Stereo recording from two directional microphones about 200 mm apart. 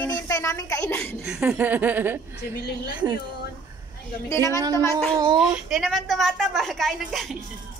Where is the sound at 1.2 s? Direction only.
5° right (ahead or behind).